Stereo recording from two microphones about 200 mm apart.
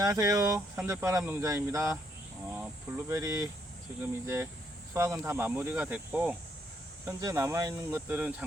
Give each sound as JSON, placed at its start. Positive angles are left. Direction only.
{"t": 0.0, "sound": "speech", "side_deg": -20}
{"t": 3.1, "sound": "speech", "side_deg": -15}